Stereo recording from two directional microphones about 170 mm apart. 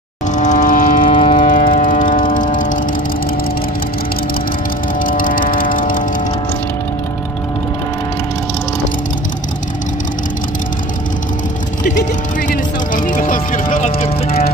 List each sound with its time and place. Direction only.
0.3 s vehicle: 45° left (ahead or behind)
1.1 s siren: 40° left (ahead or behind)
2.1 s vehicle: 50° left (ahead or behind)
4.9 s vehicle: 55° left (ahead or behind)
11.8 s vehicle: 50° left (ahead or behind)